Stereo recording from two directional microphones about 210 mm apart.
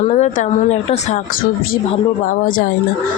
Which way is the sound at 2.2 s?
45° left (ahead or behind).